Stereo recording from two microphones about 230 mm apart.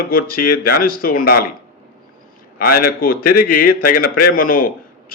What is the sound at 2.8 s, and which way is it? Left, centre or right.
A man's voice, left.